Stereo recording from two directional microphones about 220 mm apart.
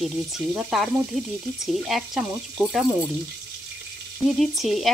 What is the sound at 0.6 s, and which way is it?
Frying, centre (ahead or behind).